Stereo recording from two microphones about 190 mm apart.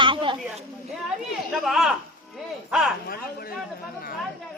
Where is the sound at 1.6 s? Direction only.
Centre (ahead or behind).